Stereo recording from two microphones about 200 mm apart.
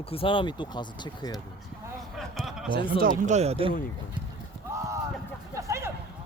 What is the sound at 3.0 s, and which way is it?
Speech, 35° right (ahead or behind).